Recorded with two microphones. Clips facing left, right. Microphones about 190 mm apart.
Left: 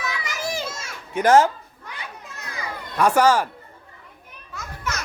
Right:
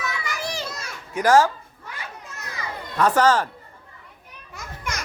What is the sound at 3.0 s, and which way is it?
Speech, 10° left (ahead or behind).